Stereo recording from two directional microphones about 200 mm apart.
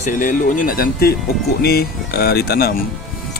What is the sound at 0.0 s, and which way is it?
Speech, 40° left (ahead or behind).